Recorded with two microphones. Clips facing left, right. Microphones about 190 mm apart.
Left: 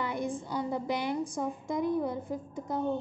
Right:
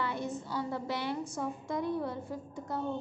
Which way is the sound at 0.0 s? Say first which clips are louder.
Left 2 dB; 15° left (ahead or behind).